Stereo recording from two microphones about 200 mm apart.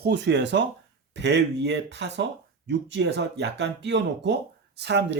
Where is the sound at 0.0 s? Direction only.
60° right (ahead or behind).